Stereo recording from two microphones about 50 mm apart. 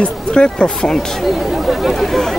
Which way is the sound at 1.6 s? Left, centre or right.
Centre.